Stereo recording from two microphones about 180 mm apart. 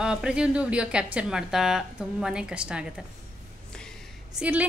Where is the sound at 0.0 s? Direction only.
5° right (ahead or behind).